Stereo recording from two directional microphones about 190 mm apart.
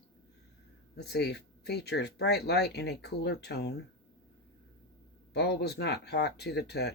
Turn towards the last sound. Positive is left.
turn(degrees=60)  # may be behind; listen again after turning